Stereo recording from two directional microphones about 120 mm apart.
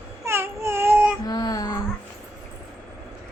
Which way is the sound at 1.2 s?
30° left (ahead or behind).